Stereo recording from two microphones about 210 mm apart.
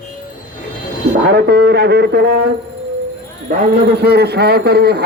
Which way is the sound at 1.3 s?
50° right (ahead or behind).